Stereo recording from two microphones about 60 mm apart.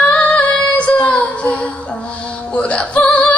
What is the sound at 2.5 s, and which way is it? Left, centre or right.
Music, centre.